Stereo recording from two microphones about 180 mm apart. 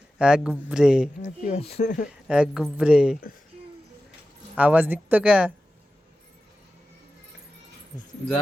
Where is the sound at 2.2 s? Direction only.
5° right (ahead or behind).